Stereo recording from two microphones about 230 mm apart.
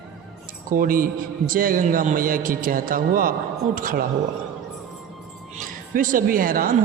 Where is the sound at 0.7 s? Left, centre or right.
Right.